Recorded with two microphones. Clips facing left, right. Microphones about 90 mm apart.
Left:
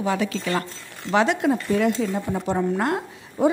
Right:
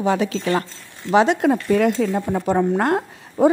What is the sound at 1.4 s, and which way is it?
A woman's voice, 55° right (ahead or behind).